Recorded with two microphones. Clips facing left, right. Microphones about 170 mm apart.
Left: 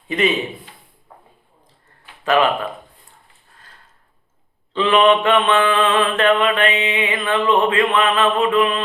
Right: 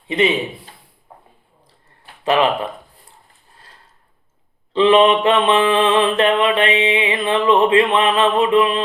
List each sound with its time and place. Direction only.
0.1 s a man's voice: 30° right (ahead or behind)
2.2 s speech: 30° right (ahead or behind)
4.7 s mantra: 30° right (ahead or behind)